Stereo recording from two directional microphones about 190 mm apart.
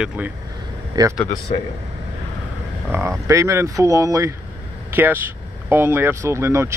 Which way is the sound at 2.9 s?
15° right (ahead or behind).